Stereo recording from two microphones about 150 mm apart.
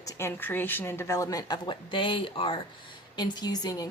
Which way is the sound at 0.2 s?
15° left (ahead or behind).